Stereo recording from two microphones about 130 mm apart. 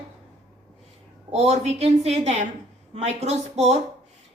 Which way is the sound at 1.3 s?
55° right (ahead or behind).